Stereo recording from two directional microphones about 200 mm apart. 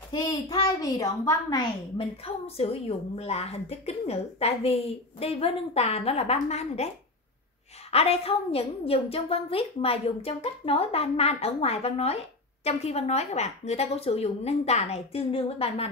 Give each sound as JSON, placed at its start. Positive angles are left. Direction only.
{"t": 0.1, "sound": "a woman's voice", "side_deg": 20}
{"t": 2.2, "sound": "a woman's voice", "side_deg": 30}
{"t": 7.9, "sound": "a woman's voice", "side_deg": 30}